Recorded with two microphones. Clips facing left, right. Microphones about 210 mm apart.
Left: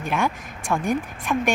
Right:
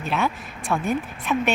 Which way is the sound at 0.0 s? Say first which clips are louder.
Even; 15° left (ahead or behind).